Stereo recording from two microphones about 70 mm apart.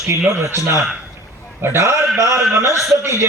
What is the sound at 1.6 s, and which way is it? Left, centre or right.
A man's voice, right.